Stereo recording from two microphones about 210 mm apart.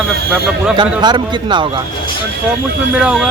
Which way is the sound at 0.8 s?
20° right (ahead or behind).